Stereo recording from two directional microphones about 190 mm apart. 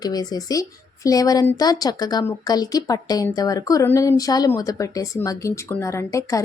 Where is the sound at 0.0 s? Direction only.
20° left (ahead or behind).